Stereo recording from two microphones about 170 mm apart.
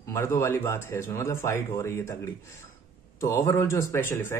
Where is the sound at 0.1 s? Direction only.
15° left (ahead or behind).